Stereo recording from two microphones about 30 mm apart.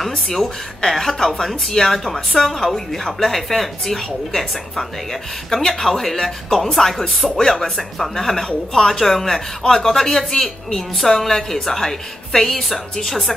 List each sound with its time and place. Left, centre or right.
0.0 s a woman's voice: centre
7.2 s a woman's voice: centre